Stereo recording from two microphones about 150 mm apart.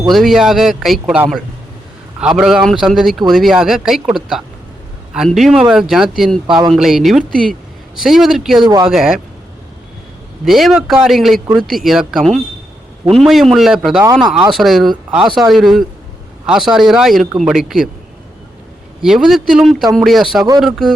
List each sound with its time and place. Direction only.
0.1 s a man's voice: centre (ahead or behind)
8.6 s speech: 25° right (ahead or behind)
8.9 s a man's voice: centre (ahead or behind)
10.4 s a man's voice: centre (ahead or behind)
19.0 s a man's voice: 5° right (ahead or behind)